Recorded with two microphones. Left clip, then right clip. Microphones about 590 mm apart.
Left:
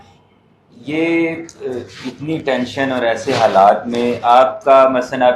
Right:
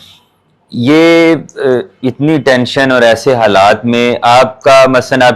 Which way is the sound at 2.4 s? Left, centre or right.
Right.